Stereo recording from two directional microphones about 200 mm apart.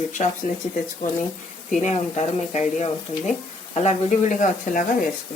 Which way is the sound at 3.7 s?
35° left (ahead or behind).